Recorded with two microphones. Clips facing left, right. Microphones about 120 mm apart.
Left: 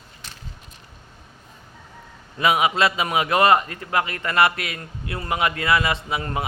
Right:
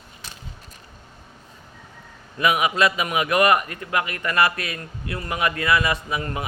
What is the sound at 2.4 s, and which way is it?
A man's voice, 30° left (ahead or behind).